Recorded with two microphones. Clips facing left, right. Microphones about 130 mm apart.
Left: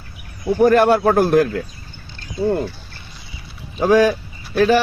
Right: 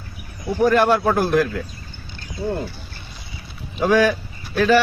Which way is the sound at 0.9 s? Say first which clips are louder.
Left 4 dB; 35° left (ahead or behind).